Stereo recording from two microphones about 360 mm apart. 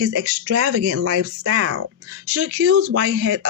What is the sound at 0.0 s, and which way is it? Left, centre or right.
Speech, right.